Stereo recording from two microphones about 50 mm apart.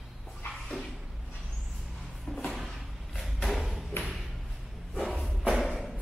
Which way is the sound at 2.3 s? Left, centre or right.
Centre.